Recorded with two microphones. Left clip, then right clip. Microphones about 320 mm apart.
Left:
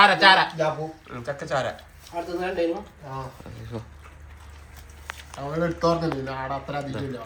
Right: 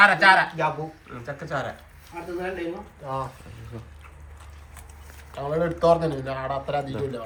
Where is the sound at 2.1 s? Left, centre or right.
Centre.